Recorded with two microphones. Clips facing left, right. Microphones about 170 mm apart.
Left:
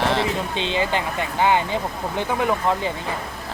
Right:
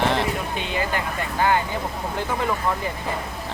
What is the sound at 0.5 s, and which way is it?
Speech, 25° left (ahead or behind).